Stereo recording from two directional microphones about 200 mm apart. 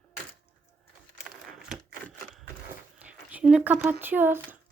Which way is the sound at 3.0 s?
5° right (ahead or behind).